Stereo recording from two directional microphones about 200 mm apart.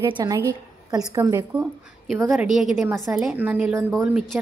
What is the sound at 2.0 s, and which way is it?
A woman's voice, centre (ahead or behind).